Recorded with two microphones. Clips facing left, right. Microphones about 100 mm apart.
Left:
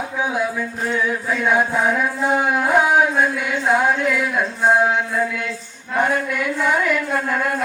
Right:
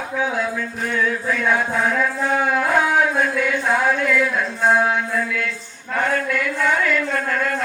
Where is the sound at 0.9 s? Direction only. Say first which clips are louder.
Even; 20° left (ahead or behind).